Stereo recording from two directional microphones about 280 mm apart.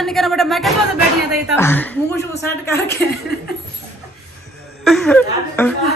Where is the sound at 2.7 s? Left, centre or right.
Left.